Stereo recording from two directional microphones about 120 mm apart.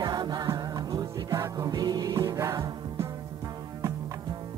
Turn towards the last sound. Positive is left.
turn(degrees=-30)  # may be behind; listen again after turning